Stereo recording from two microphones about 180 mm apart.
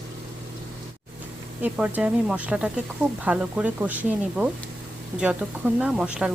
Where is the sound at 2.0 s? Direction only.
5° right (ahead or behind).